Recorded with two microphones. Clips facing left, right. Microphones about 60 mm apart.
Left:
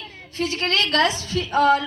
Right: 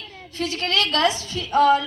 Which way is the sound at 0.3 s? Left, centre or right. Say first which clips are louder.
Left 1 dB; left.